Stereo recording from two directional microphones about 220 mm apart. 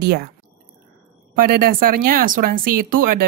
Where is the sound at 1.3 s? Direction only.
40° right (ahead or behind).